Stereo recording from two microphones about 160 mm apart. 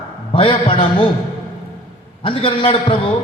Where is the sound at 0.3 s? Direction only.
35° left (ahead or behind).